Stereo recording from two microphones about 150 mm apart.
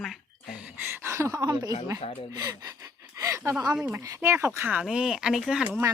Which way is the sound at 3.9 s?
20° right (ahead or behind).